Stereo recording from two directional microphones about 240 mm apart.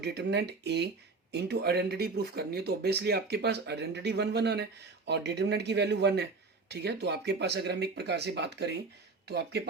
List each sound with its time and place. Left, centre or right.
0.0 s speech: right